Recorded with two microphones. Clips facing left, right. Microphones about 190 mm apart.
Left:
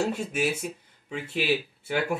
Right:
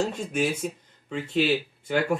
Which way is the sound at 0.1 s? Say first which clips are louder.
Right 1 dB; 5° left (ahead or behind).